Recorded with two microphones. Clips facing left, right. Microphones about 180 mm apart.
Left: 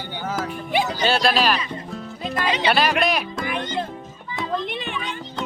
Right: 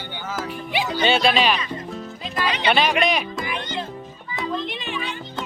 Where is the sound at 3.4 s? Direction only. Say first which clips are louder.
Left 2 dB; 50° left (ahead or behind).